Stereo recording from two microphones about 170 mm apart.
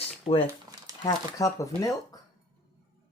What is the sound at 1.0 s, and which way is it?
Speech, 20° left (ahead or behind).